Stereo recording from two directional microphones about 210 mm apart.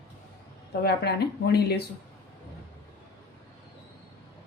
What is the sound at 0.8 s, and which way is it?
Speech, 50° left (ahead or behind).